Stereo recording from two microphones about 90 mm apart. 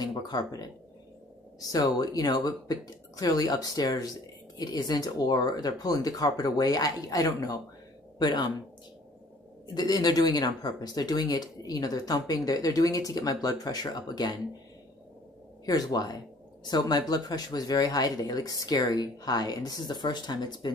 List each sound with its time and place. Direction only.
0.0 s speech: 50° left (ahead or behind)
9.8 s speech: 45° left (ahead or behind)
15.6 s speech: 45° left (ahead or behind)